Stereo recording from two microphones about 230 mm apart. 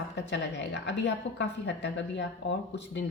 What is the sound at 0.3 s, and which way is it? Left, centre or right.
Speech, left.